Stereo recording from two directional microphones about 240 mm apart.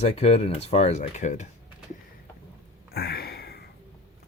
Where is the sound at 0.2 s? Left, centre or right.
Left.